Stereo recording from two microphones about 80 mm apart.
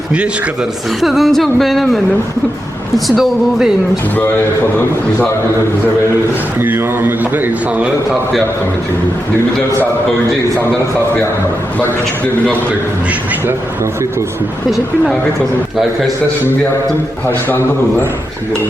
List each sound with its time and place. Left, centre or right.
1.0 s speech: centre
3.1 s speech: centre
6.6 s a man's voice: right